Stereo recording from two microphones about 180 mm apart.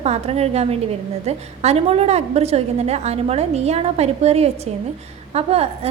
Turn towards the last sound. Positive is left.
turn(degrees=-35)  # may be behind; listen again after turning